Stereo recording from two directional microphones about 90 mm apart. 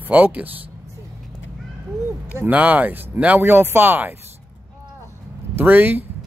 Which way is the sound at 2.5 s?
15° right (ahead or behind).